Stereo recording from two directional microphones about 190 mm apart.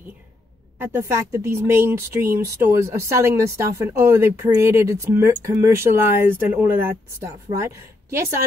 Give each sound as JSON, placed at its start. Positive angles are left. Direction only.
{"t": 0.7, "sound": "speech", "side_deg": -10}